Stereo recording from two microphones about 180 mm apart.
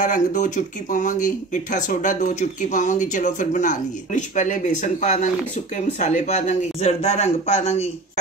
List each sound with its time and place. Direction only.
0.0 s speech: 45° left (ahead or behind)